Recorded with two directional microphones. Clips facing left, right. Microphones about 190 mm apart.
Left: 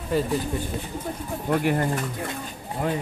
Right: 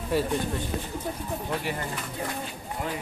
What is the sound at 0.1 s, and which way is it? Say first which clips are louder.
Speech: left 2 dB; centre (ahead or behind).